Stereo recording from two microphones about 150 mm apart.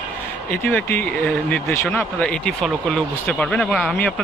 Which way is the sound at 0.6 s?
15° left (ahead or behind).